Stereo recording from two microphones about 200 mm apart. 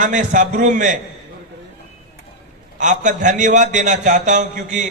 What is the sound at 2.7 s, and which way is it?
A man's voice, 40° right (ahead or behind).